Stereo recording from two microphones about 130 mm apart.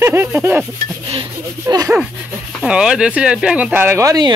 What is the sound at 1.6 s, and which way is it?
Speech, 30° right (ahead or behind).